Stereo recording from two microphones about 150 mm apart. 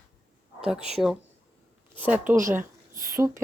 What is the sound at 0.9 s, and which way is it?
Speech, centre (ahead or behind).